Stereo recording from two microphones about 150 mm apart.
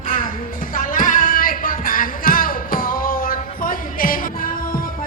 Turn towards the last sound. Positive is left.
turn(degrees=70)  # may be behind; listen again after turning